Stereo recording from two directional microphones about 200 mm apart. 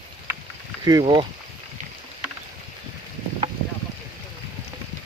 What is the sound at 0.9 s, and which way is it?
Speech, 20° right (ahead or behind).